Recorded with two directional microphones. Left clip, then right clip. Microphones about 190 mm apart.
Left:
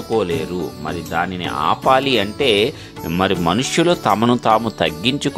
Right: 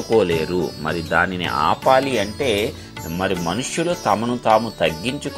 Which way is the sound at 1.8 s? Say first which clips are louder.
Left 3 dB; 20° left (ahead or behind).